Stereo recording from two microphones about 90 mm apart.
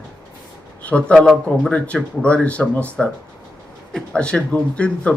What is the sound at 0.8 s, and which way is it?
Speech, 15° left (ahead or behind).